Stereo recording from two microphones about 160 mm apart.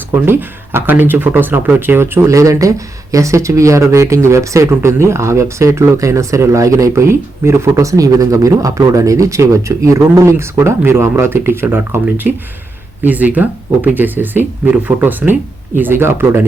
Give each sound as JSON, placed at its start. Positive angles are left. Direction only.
{"t": 0.1, "sound": "speech", "side_deg": -15}